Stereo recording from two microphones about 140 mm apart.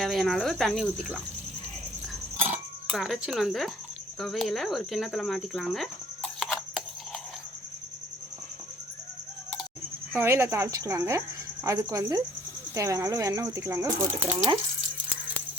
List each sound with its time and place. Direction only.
0.0 s speech: centre (ahead or behind)
2.9 s speech: 5° right (ahead or behind)
4.2 s cricket: centre (ahead or behind)
10.2 s speech: 15° right (ahead or behind)